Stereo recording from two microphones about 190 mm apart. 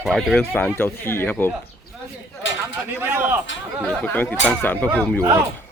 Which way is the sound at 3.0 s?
10° right (ahead or behind).